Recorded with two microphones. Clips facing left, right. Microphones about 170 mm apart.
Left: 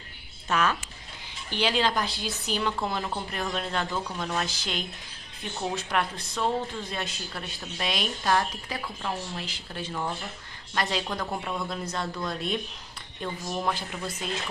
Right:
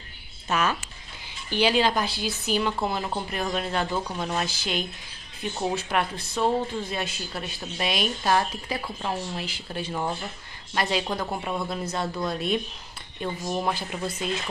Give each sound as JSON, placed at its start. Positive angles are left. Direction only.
{"t": 0.5, "sound": "speech", "side_deg": -5}
{"t": 4.6, "sound": "speech", "side_deg": -5}
{"t": 5.8, "sound": "speech", "side_deg": -5}